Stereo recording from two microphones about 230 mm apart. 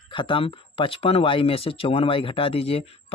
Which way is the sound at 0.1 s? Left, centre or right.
Left.